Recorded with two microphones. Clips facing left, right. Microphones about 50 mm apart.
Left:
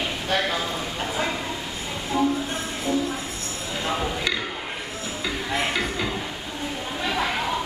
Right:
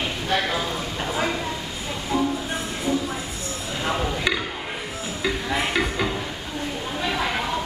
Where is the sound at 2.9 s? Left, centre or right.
Centre.